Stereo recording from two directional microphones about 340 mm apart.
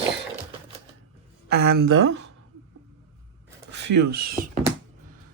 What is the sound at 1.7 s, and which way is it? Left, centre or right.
Speech, right.